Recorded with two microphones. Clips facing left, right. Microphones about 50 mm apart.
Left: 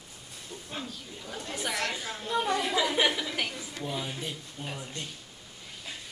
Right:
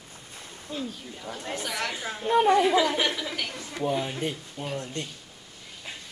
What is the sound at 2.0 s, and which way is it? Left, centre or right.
Speech, centre.